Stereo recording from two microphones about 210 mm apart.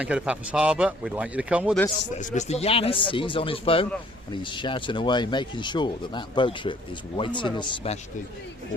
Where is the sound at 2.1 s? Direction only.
35° left (ahead or behind).